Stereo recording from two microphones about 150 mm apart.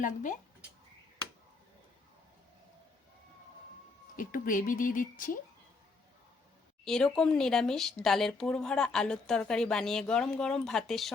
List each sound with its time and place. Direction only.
0.0 s speech: 60° left (ahead or behind)
4.2 s speech: 65° left (ahead or behind)
6.8 s a woman's voice: 5° left (ahead or behind)